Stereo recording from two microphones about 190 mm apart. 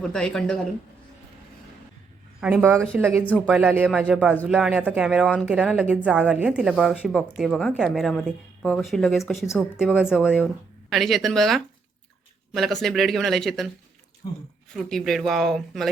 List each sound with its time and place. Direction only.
0.0 s speech: 5° left (ahead or behind)
2.4 s speech: 10° right (ahead or behind)
14.7 s speech: centre (ahead or behind)